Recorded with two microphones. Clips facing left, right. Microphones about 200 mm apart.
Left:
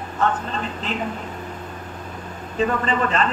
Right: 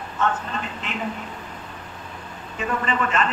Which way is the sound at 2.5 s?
35° left (ahead or behind).